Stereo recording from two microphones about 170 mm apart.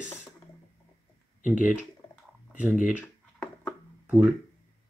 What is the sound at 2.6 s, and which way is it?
Speech, 10° right (ahead or behind).